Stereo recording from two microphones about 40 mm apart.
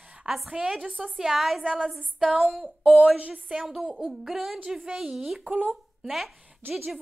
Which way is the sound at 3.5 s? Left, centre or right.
Centre.